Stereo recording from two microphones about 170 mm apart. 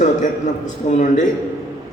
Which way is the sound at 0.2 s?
45° left (ahead or behind).